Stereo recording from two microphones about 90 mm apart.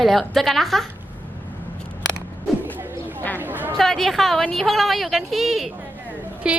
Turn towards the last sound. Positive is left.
turn(degrees=-10)  # may be behind; listen again after turning